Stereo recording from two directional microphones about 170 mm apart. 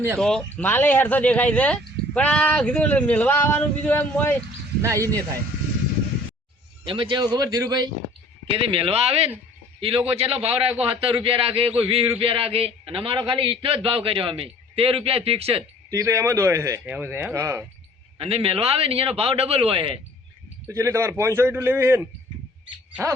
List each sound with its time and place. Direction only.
0.2 s speech: 5° left (ahead or behind)
4.8 s a man's voice: 20° right (ahead or behind)
6.8 s a man's voice: 30° right (ahead or behind)
15.9 s a man's voice: 20° right (ahead or behind)
18.2 s a man's voice: 35° right (ahead or behind)
20.7 s a man's voice: 15° right (ahead or behind)